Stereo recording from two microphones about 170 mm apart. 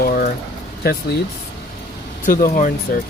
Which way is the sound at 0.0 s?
55° left (ahead or behind).